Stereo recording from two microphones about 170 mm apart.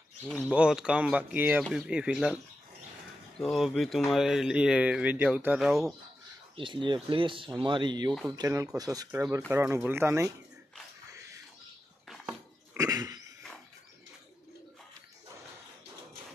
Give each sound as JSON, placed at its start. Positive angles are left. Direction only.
{"t": 0.4, "sound": "speech", "side_deg": -5}
{"t": 6.5, "sound": "speech", "side_deg": -30}
{"t": 11.1, "sound": "a sound", "side_deg": -20}
{"t": 12.7, "sound": "dog", "side_deg": -20}